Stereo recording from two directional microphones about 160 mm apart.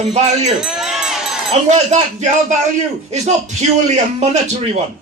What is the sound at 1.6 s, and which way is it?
Speech, 45° right (ahead or behind).